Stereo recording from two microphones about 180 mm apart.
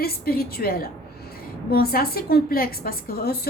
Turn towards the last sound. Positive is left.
turn(degrees=60)  # may be behind; listen again after turning